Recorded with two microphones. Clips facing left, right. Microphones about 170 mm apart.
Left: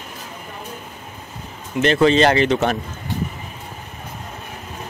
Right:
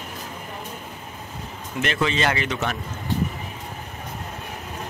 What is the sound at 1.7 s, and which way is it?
Speech, 35° left (ahead or behind).